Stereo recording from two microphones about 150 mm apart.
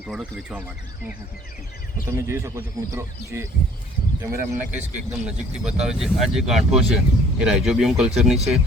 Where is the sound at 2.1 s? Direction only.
20° right (ahead or behind); by 8.6 s centre (ahead or behind).